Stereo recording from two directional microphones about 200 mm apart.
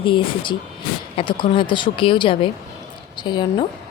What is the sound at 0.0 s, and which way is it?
Speech, 25° left (ahead or behind).